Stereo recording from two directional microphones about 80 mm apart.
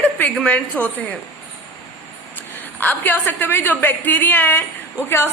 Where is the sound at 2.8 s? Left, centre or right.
Left.